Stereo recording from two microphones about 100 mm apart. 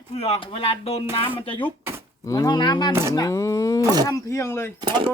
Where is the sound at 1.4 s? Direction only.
65° left (ahead or behind).